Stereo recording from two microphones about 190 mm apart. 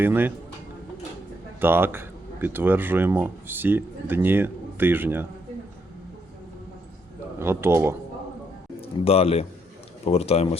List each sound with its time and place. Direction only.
0.0 s speech: 10° right (ahead or behind)
1.6 s speech: 10° right (ahead or behind)
7.3 s speech: 15° right (ahead or behind)
8.8 s a man's voice: 30° left (ahead or behind)